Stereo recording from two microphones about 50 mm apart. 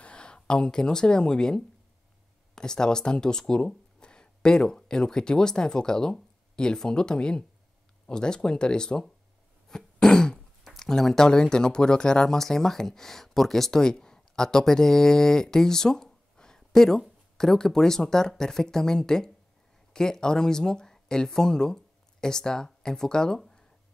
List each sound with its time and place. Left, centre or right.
0.0 s speech: left
9.7 s throat clearing: centre
10.7 s speech: centre